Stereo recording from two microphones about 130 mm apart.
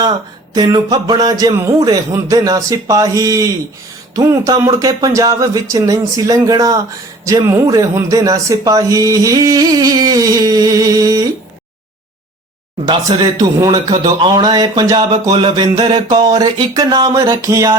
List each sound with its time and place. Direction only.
0.5 s speech: 30° right (ahead or behind)
13.3 s speech: 30° right (ahead or behind)